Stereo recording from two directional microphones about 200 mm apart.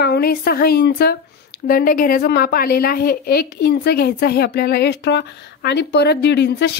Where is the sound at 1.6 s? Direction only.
45° left (ahead or behind).